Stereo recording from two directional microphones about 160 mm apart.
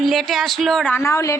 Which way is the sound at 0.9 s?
15° left (ahead or behind).